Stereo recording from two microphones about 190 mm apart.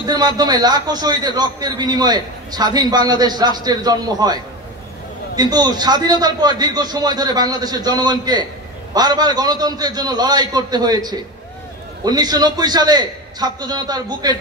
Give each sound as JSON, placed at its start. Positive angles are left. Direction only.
{"t": 0.0, "sound": "a man's voice", "side_deg": -20}